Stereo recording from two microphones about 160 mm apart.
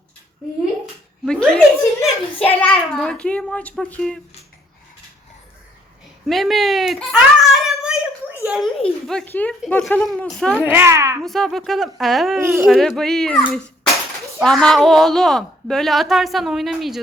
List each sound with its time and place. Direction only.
1.2 s speech: 5° left (ahead or behind)
2.0 s child singing: 10° left (ahead or behind)
2.9 s speech: 5° left (ahead or behind)
6.2 s a child's voice: centre (ahead or behind)
10.5 s speech: 10° right (ahead or behind)
11.2 s speech: centre (ahead or behind)
12.4 s speech: 15° right (ahead or behind)
12.6 s speech: centre (ahead or behind)
14.4 s speech: 5° left (ahead or behind)